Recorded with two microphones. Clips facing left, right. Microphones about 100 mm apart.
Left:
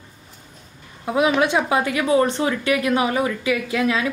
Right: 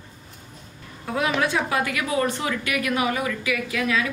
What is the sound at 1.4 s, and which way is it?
A woman's voice, 20° left (ahead or behind).